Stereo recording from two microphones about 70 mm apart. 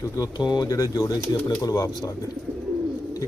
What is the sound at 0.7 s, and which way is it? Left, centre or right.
Speech, left.